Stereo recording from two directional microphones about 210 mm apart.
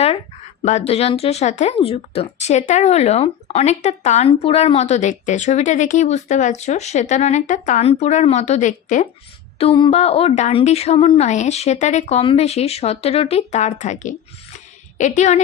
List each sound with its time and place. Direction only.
0.6 s speech: 35° left (ahead or behind)
9.6 s a woman's voice: 25° left (ahead or behind)